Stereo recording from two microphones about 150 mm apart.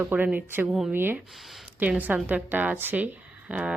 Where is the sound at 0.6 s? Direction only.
Centre (ahead or behind).